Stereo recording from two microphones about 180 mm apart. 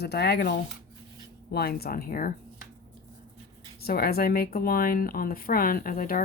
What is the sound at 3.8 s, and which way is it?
Speech, 55° left (ahead or behind).